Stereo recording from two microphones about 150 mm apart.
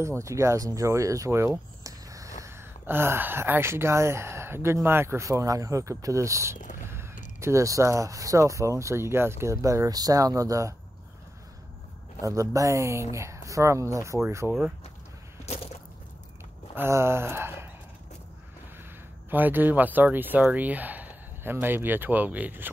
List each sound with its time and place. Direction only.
0.0 s speech: 20° right (ahead or behind)
12.2 s speech: 20° right (ahead or behind)
15.4 s biting: 45° left (ahead or behind)
16.7 s speech: 15° right (ahead or behind)
19.3 s speech: 10° right (ahead or behind)